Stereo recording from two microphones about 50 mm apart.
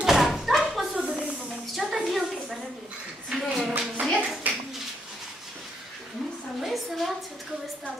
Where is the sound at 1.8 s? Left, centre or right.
Centre.